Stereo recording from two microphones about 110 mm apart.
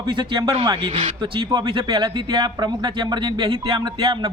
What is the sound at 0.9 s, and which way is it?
Speech, 90° right.